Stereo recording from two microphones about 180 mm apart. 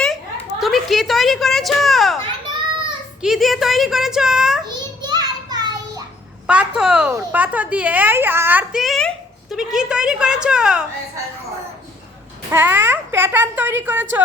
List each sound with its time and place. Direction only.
0.6 s a woman's voice: centre (ahead or behind)
3.2 s a child's voice: centre (ahead or behind)
4.6 s a sound: 25° right (ahead or behind)
6.5 s a child's voice: 5° right (ahead or behind)
12.5 s a child's voice: 10° right (ahead or behind)